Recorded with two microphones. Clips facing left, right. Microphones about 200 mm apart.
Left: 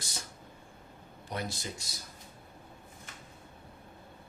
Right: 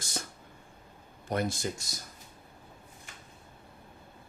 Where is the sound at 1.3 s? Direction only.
50° right (ahead or behind).